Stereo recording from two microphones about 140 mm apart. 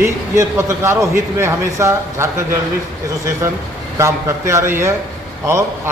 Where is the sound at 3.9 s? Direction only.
20° right (ahead or behind).